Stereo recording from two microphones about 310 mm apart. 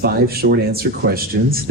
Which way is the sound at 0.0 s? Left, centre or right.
Right.